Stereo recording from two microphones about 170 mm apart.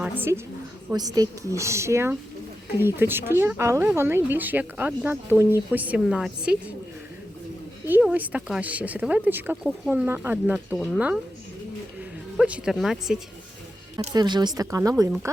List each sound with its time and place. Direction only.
0.0 s a woman's voice: 10° right (ahead or behind)
7.9 s speech: 10° right (ahead or behind)
12.4 s speech: 5° right (ahead or behind)
14.1 s speech: 25° right (ahead or behind)